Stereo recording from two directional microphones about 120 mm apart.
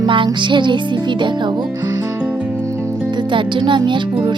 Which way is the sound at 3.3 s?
45° right (ahead or behind).